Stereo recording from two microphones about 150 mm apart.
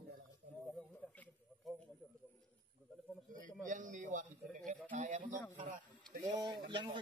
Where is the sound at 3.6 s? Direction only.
60° right (ahead or behind).